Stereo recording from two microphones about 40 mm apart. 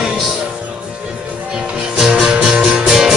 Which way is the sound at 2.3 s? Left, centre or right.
Centre.